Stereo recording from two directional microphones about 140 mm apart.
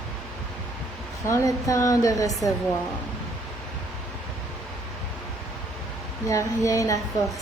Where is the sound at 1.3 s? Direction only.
25° left (ahead or behind).